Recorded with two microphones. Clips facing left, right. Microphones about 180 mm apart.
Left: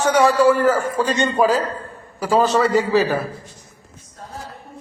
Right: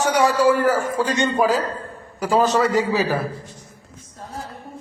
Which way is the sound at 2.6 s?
15° right (ahead or behind).